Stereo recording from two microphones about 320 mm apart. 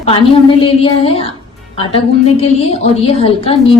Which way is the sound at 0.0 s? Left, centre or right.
Centre.